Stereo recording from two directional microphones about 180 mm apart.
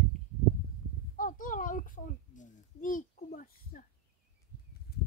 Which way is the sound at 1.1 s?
50° left (ahead or behind).